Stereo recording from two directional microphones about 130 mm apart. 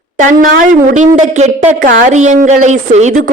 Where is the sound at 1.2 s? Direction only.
60° right (ahead or behind).